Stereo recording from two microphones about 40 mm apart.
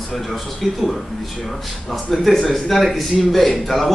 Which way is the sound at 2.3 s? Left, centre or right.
Centre.